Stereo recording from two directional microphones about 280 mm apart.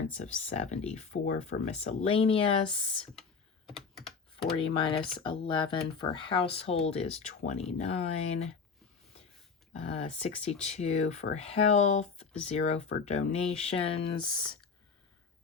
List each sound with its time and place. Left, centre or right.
0.2 s speech: left
3.7 s computer keyboard: centre
4.4 s speech: centre
9.8 s speech: left